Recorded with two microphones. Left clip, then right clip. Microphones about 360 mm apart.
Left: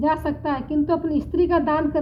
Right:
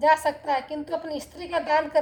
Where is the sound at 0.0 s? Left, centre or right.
Centre.